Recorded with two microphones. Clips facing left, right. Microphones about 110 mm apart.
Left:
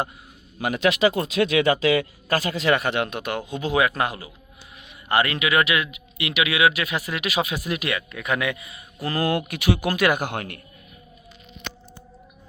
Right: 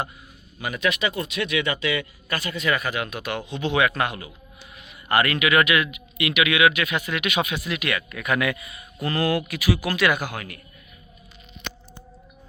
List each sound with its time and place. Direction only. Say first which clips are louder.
0.6 s speech: left 5 dB; 80° left
3.5 s speech: even; 35° left (ahead or behind)
7.9 s speech: right 3 dB; 25° left (ahead or behind)
9.0 s speech: even; centre (ahead or behind)
9.3 s speech: left 1 dB; 50° left (ahead or behind)